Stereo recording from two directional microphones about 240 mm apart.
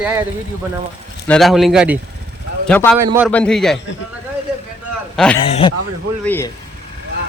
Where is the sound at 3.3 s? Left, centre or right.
Centre.